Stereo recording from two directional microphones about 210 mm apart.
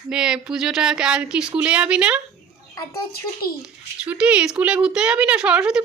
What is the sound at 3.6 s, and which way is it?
Speech, 5° right (ahead or behind).